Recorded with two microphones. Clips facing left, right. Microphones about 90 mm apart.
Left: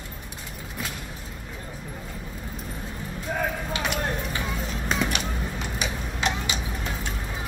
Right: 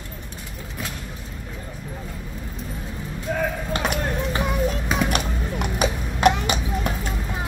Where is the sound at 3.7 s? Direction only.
45° right (ahead or behind).